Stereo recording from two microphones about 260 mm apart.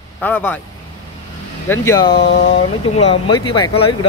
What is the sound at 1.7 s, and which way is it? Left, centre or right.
Speech, centre.